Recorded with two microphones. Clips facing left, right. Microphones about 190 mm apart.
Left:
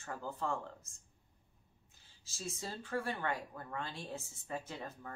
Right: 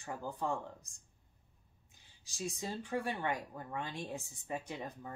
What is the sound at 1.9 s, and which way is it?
Speech, 15° right (ahead or behind).